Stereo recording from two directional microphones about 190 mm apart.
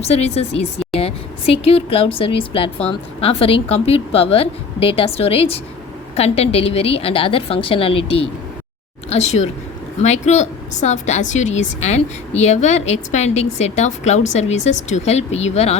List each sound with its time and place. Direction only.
0.0 s a woman's voice: 35° left (ahead or behind)
9.0 s a woman's voice: 35° left (ahead or behind)